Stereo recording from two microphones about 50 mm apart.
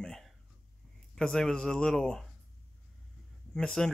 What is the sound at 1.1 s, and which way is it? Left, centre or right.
Speech, centre.